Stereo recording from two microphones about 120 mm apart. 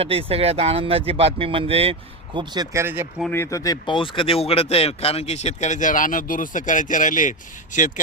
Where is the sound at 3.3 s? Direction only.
25° left (ahead or behind).